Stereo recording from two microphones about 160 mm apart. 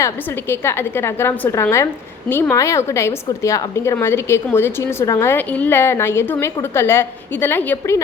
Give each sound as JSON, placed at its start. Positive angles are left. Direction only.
{"t": 0.0, "sound": "a woman's voice", "side_deg": 15}